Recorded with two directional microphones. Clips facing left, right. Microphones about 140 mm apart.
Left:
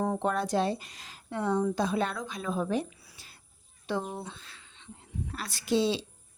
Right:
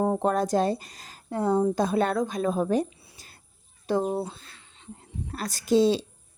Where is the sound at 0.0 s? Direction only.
35° right (ahead or behind).